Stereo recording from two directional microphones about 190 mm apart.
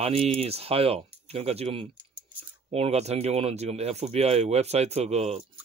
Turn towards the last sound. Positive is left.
turn(degrees=-35)  # may be behind; listen again after turning